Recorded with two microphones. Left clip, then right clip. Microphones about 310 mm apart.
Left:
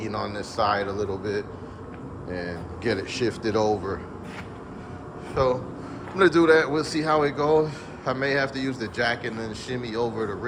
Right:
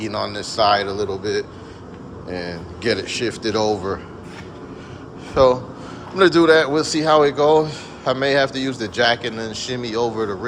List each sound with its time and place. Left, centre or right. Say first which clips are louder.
0.0 s a man's voice: right 5 dB; centre
5.3 s a man's voice: right 9 dB; centre